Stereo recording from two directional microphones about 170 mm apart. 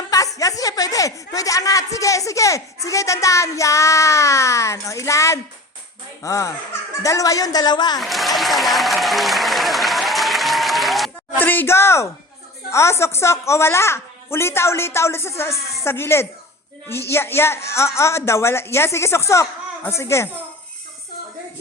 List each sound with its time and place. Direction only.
0.3 s a woman's voice: 20° left (ahead or behind)
8.0 s applause: centre (ahead or behind)
11.3 s a woman's voice: 10° left (ahead or behind)